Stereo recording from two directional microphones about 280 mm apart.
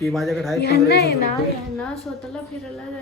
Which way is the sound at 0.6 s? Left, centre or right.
Left.